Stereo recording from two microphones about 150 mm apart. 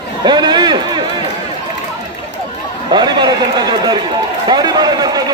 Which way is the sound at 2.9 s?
30° right (ahead or behind).